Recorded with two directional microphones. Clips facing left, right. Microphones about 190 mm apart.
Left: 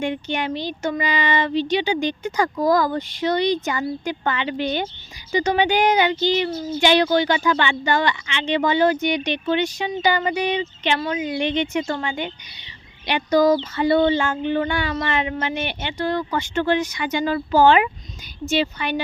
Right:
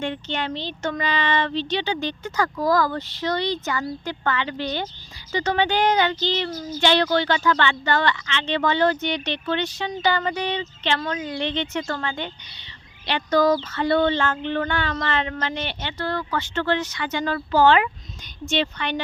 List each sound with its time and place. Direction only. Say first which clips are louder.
0.0 s speech: left 3 dB; 10° left (ahead or behind)
6.5 s speech: left 4 dB; 25° left (ahead or behind)
6.7 s speech: left 3 dB; 10° left (ahead or behind)